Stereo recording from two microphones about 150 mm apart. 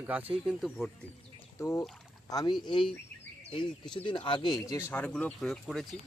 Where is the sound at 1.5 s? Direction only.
20° left (ahead or behind).